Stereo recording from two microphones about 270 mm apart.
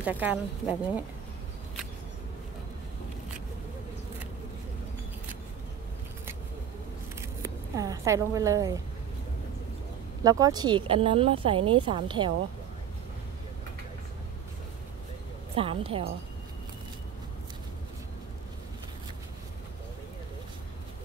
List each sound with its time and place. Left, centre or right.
0.0 s speech: centre
7.2 s zipper: centre
10.2 s speech: centre
15.5 s speech: right